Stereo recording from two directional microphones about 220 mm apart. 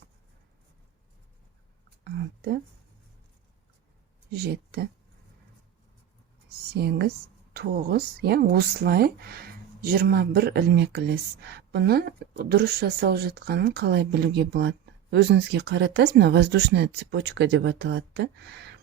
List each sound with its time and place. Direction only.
2.0 s a sound: 50° right (ahead or behind)
4.3 s speech: 45° right (ahead or behind)
6.7 s speech: 45° right (ahead or behind)